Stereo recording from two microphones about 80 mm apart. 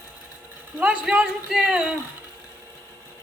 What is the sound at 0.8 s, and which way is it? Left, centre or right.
A man's voice, centre.